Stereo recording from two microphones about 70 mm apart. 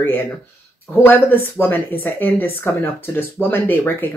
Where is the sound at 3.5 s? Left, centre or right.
Left.